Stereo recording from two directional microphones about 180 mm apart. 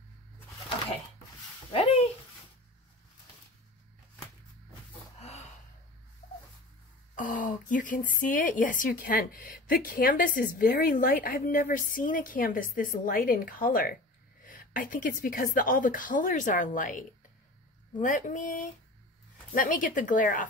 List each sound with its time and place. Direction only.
1.7 s a sound: 35° left (ahead or behind)
7.2 s a woman's voice: 45° left (ahead or behind)
18.0 s a woman's voice: 45° left (ahead or behind)